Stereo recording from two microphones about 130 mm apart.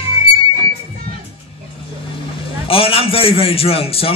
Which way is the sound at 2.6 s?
45° left (ahead or behind).